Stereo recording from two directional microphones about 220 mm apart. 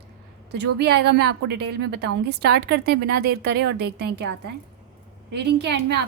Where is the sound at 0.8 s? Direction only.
50° right (ahead or behind).